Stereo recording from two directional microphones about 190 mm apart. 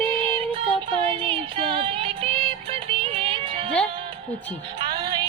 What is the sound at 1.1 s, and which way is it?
Music, 30° right (ahead or behind).